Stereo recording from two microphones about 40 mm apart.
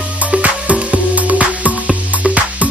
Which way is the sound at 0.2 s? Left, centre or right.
Right.